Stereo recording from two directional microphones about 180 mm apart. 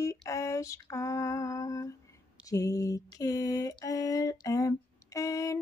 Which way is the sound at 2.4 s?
20° left (ahead or behind).